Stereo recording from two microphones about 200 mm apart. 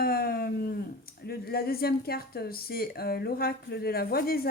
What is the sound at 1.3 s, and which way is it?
Speech, 50° left (ahead or behind).